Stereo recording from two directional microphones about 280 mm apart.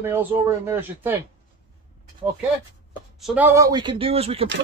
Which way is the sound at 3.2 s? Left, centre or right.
Centre.